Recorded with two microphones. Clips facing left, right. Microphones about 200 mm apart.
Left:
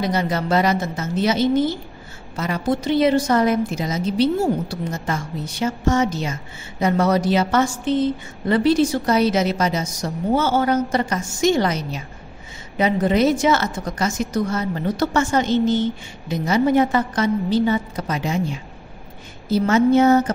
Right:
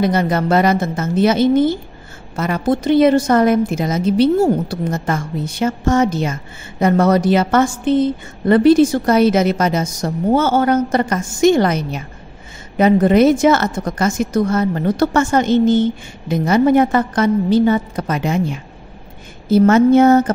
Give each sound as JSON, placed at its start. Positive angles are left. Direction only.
{"t": 0.0, "sound": "a woman's voice", "side_deg": -55}